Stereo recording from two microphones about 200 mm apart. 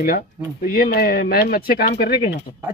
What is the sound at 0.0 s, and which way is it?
Speech, 45° left (ahead or behind).